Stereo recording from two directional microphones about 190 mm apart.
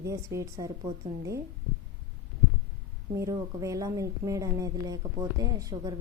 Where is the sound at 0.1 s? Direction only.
15° right (ahead or behind).